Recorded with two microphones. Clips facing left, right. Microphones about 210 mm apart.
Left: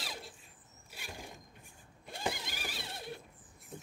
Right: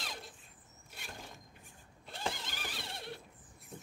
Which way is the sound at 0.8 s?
5° left (ahead or behind).